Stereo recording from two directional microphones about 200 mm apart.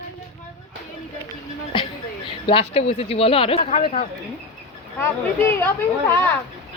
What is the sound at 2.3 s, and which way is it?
A man's voice, 25° left (ahead or behind).